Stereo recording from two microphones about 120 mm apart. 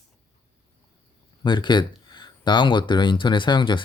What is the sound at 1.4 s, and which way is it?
Speech, 40° left (ahead or behind).